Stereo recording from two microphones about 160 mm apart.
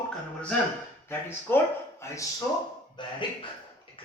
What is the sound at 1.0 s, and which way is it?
Speech, 15° left (ahead or behind).